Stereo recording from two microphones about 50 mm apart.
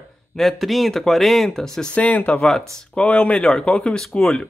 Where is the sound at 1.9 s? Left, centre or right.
Left.